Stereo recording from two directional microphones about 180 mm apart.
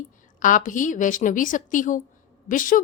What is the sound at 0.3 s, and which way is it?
A woman's voice, 45° left (ahead or behind).